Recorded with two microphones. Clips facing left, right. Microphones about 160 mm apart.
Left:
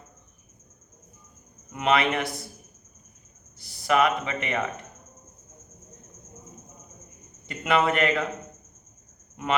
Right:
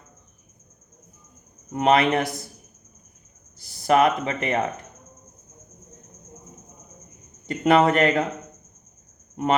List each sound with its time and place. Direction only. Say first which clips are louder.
1.7 s speech: right 5 dB; 40° right (ahead or behind)
3.8 s speech: right 4 dB; 40° right (ahead or behind)
7.4 s speech: right 6 dB; 40° right (ahead or behind)